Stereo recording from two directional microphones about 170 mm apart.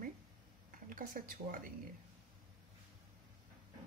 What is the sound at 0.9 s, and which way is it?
Speech, 55° right (ahead or behind).